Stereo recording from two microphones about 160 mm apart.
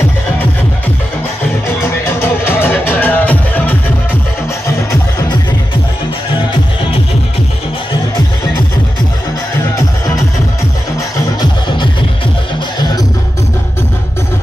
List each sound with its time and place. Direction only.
1.7 s music: 15° left (ahead or behind)
12.7 s music: 25° left (ahead or behind)